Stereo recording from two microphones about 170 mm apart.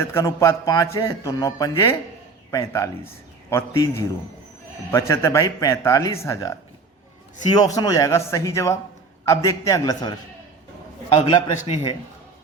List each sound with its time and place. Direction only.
0.0 s speech: 15° left (ahead or behind)
11.1 s a man's voice: 35° left (ahead or behind)